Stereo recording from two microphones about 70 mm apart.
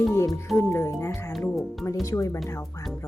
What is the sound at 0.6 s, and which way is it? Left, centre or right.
Speech, left.